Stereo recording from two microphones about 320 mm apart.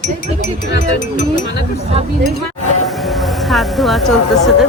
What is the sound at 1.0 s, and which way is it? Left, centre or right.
Speech, left.